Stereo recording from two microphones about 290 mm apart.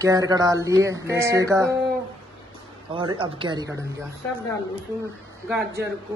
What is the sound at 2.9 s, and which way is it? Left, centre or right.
Speech, centre.